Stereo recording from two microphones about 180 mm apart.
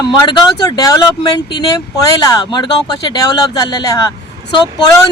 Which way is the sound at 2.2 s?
20° left (ahead or behind).